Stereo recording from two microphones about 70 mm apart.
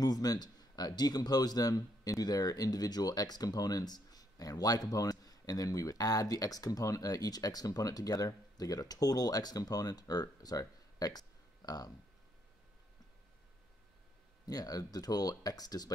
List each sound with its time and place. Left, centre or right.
0.0 s speech: left
14.4 s speech: left